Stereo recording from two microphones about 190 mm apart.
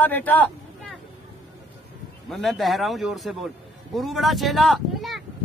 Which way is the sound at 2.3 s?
Centre (ahead or behind).